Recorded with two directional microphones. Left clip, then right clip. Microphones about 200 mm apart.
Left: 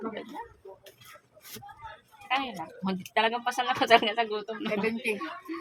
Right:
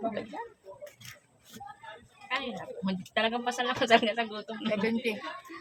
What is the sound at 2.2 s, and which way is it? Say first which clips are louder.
A woman's voice: left 4 dB; 30° left (ahead or behind).